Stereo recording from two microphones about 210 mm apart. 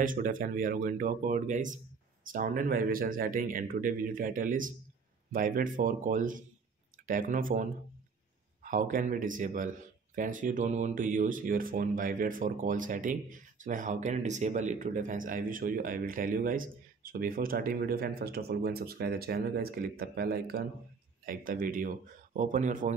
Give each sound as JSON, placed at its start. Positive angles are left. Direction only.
{"t": 0.0, "sound": "speech", "side_deg": -40}